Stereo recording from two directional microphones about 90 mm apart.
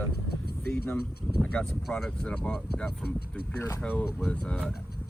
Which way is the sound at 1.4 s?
10° left (ahead or behind).